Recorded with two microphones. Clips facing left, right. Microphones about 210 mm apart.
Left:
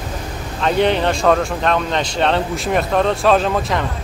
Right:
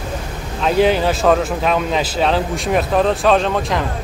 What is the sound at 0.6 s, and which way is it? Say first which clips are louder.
Speech: right 1 dB; centre (ahead or behind).